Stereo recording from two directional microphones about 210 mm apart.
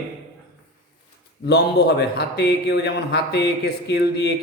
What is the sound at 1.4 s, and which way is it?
Speech, 50° left (ahead or behind).